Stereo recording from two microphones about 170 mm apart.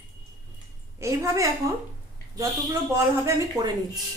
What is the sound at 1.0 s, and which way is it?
Speech, 15° right (ahead or behind).